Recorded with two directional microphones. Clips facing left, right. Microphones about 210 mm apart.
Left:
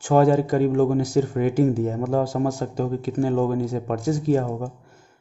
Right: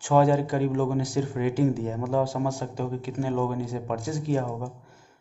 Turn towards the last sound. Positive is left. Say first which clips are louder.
# left 5 dB
turn(degrees=45)  # may be behind; listen again after turning